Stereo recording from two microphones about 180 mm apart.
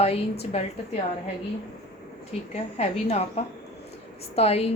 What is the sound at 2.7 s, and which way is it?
A woman's voice, 35° left (ahead or behind).